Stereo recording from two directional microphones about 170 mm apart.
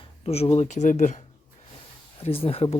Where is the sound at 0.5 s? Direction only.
45° left (ahead or behind).